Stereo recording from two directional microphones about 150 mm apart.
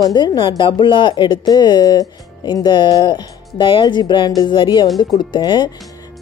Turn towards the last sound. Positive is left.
turn(degrees=30)  # may be behind; listen again after turning